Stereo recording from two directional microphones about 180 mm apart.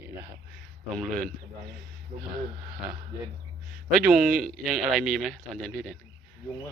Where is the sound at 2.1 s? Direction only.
45° right (ahead or behind).